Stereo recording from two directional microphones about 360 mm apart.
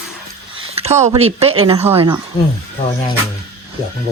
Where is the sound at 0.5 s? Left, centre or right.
Centre.